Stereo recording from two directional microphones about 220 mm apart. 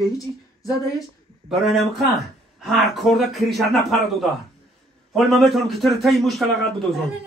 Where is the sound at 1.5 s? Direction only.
Centre (ahead or behind).